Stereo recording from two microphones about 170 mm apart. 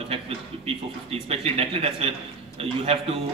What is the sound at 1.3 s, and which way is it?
A man's voice, 35° right (ahead or behind).